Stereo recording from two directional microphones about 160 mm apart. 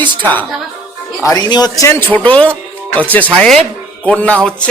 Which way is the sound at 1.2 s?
25° left (ahead or behind).